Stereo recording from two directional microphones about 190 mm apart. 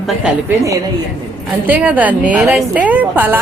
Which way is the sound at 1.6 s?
10° right (ahead or behind).